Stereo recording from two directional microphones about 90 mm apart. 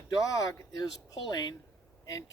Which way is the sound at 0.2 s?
40° left (ahead or behind).